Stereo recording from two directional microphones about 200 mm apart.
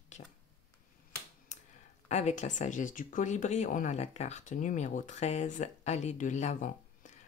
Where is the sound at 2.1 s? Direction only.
35° left (ahead or behind).